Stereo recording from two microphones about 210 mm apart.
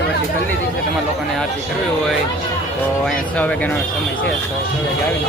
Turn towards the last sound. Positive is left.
turn(degrees=5)  # may be behind; listen again after turning